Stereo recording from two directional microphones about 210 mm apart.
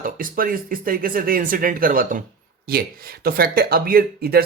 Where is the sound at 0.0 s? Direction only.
40° right (ahead or behind).